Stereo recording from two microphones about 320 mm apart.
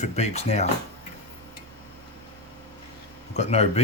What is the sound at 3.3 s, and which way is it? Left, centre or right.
Speech, centre.